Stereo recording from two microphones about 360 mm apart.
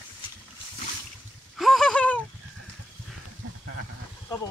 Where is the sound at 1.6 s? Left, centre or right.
Centre.